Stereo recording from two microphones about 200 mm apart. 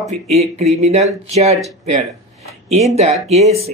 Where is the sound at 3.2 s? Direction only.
30° right (ahead or behind).